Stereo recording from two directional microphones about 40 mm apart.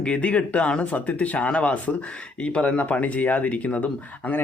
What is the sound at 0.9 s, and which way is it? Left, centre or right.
Speech, left.